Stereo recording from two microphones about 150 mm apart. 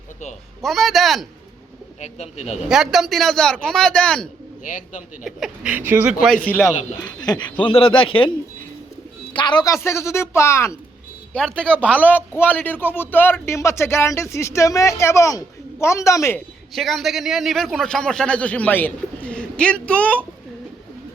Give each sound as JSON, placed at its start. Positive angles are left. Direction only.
{"t": 0.6, "sound": "a man's voice", "side_deg": 0}
{"t": 2.0, "sound": "speech", "side_deg": 45}
{"t": 2.6, "sound": "a man's voice", "side_deg": -5}
{"t": 4.6, "sound": "a man's voice", "side_deg": 60}
{"t": 5.2, "sound": "speech", "side_deg": -5}
{"t": 6.2, "sound": "a man's voice", "side_deg": 5}
{"t": 7.2, "sound": "speech", "side_deg": 30}
{"t": 9.3, "sound": "speech", "side_deg": 30}
{"t": 11.3, "sound": "a man's voice", "side_deg": 5}
{"t": 16.7, "sound": "a man's voice", "side_deg": 0}